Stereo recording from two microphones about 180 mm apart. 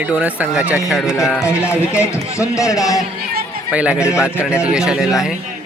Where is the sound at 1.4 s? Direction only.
15° left (ahead or behind).